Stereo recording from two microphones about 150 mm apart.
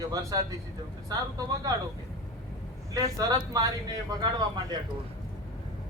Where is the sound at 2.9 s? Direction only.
25° right (ahead or behind).